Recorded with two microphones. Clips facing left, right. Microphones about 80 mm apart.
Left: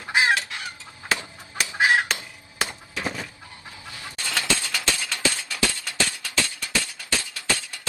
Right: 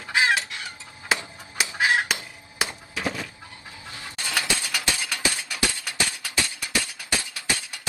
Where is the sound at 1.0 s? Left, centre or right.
Centre.